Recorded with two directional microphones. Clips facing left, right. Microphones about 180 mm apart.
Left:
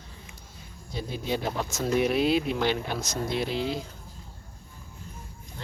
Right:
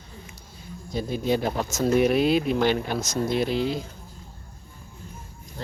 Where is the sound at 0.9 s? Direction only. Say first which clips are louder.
Right 6 dB; 50° right (ahead or behind).